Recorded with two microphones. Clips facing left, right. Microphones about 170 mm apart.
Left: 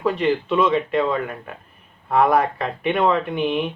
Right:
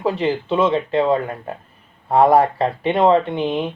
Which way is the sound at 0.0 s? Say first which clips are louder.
Even; 30° right (ahead or behind).